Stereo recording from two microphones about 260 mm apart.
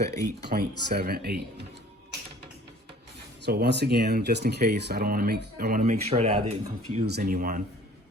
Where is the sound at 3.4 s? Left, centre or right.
Right.